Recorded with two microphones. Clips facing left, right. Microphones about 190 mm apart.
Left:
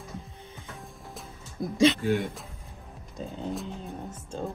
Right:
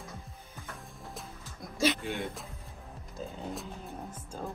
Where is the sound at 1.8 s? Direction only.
Centre (ahead or behind).